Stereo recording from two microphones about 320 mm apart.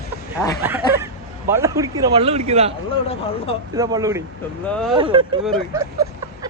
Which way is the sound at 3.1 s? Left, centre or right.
Centre.